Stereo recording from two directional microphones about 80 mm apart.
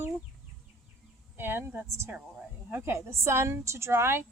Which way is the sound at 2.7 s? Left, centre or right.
Right.